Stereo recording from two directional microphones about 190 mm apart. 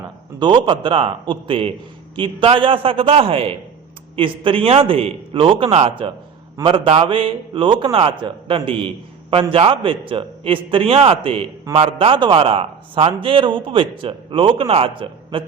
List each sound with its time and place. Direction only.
0.3 s a man's voice: 25° right (ahead or behind)